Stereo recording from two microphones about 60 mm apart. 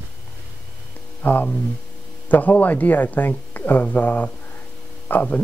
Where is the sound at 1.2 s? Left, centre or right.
Left.